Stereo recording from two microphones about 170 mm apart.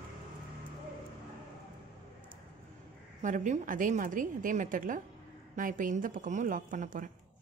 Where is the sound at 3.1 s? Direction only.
45° right (ahead or behind).